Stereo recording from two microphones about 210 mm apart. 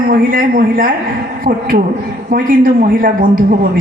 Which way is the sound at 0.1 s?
40° right (ahead or behind).